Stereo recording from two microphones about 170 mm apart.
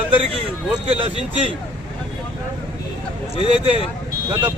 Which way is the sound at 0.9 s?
35° right (ahead or behind).